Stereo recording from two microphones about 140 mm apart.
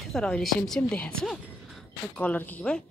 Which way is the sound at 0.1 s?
5° left (ahead or behind).